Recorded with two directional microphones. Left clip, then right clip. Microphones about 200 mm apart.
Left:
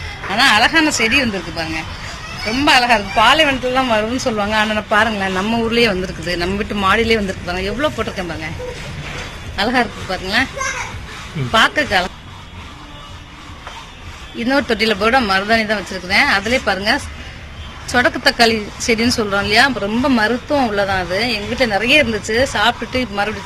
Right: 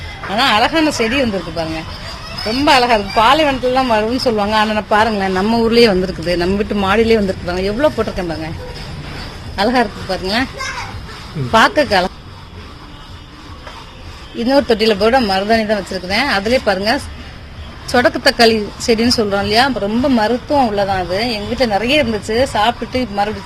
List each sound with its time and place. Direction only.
0.3 s speech: 50° right (ahead or behind)
2.6 s speech: 50° right (ahead or behind)
9.7 s speech: 45° right (ahead or behind)
11.5 s speech: 45° right (ahead or behind)
14.3 s speech: 30° right (ahead or behind)